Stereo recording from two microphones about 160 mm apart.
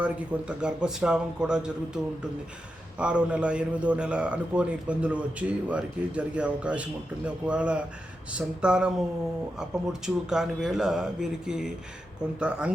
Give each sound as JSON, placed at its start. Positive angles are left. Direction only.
{"t": 0.0, "sound": "speech", "side_deg": -5}
{"t": 3.0, "sound": "a man's voice", "side_deg": -5}